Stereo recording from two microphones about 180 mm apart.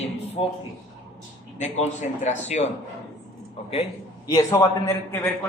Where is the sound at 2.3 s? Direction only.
40° left (ahead or behind).